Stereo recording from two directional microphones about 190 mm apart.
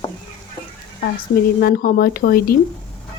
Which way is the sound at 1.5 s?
50° left (ahead or behind).